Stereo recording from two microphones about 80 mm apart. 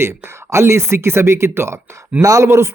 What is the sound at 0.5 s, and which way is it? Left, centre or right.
A man's voice, right.